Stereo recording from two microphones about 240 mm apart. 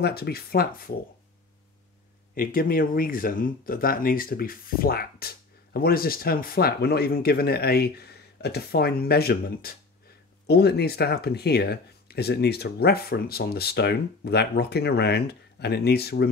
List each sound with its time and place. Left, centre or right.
0.0 s speech: left
2.3 s speech: left